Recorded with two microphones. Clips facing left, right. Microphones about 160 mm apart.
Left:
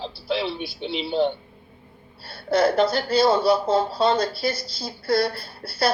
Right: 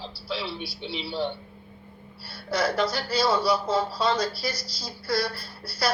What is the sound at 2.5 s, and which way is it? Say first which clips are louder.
Speech: left 6 dB; 25° left (ahead or behind).